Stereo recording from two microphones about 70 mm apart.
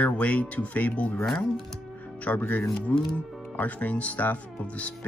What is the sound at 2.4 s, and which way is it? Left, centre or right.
Speech, left.